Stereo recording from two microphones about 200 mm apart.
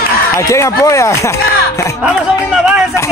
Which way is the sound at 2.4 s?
5° right (ahead or behind).